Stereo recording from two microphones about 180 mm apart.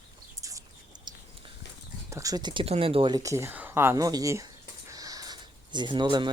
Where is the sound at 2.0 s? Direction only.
20° right (ahead or behind).